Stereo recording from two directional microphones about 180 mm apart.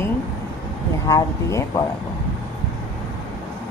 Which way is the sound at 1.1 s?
15° left (ahead or behind).